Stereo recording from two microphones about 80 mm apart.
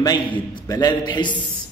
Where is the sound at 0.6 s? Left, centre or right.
Left.